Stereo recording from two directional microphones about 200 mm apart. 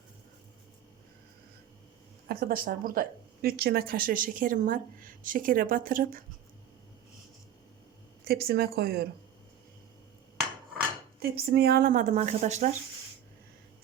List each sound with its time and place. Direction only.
2.2 s speech: 50° right (ahead or behind)
8.2 s speech: 50° right (ahead or behind)
11.2 s speech: 55° right (ahead or behind); by 12.7 s 35° right (ahead or behind)